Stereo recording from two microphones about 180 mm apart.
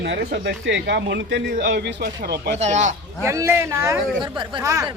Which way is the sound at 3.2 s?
15° right (ahead or behind).